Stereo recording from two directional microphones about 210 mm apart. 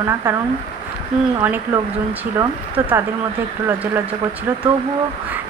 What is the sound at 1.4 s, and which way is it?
Speech, 10° right (ahead or behind).